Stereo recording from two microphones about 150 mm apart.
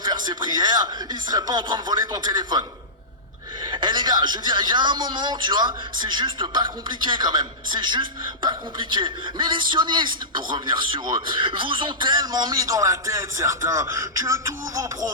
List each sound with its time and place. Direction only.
0.0 s speech: 30° right (ahead or behind)
3.7 s a man's voice: 30° right (ahead or behind)